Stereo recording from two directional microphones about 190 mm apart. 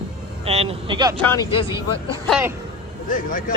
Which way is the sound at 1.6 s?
15° right (ahead or behind).